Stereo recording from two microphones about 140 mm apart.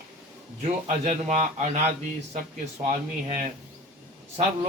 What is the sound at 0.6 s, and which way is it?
A man's voice, 55° right (ahead or behind).